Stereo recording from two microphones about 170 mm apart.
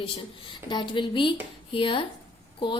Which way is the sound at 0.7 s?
30° left (ahead or behind).